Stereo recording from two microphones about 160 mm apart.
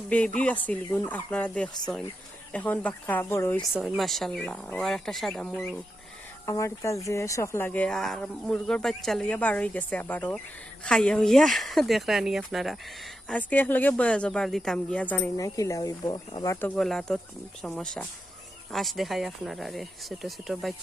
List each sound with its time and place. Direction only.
0.1 s speech: 10° left (ahead or behind)
3.6 s speech: 5° right (ahead or behind)
6.4 s speech: 20° left (ahead or behind)
15.4 s speech: 20° left (ahead or behind)
16.6 s speech: 5° left (ahead or behind)